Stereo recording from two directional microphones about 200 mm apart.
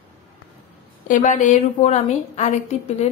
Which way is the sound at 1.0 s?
40° left (ahead or behind).